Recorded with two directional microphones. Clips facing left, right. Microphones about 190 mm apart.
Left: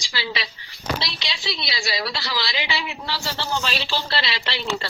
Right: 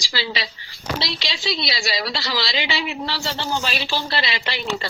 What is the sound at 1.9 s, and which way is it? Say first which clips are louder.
Speech: left 1 dB; 25° right (ahead or behind).